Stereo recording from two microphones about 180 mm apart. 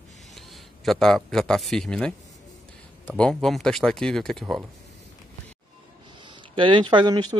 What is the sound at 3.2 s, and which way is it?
Speech, 5° left (ahead or behind).